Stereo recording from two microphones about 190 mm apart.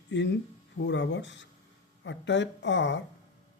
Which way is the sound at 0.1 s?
70° left (ahead or behind).